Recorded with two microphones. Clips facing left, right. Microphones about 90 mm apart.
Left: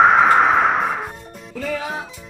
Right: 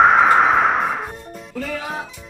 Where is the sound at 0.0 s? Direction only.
Centre (ahead or behind).